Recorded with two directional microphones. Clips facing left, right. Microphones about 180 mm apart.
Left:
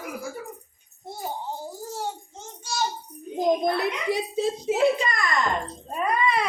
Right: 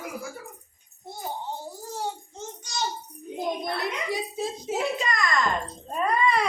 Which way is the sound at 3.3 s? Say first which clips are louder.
Left 8 dB; 40° left (ahead or behind).